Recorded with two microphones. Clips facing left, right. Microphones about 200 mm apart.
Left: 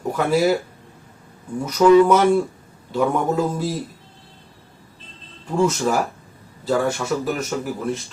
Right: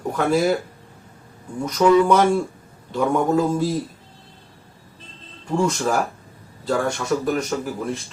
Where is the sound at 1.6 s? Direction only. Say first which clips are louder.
Left 3 dB; 5° left (ahead or behind).